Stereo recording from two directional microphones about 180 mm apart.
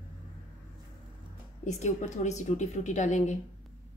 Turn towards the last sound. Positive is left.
turn(degrees=40)  # may be behind; listen again after turning